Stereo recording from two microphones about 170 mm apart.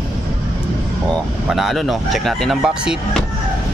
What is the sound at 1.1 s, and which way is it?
Speech, centre (ahead or behind).